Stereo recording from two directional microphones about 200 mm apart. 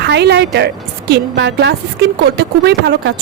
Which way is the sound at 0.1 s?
60° right (ahead or behind).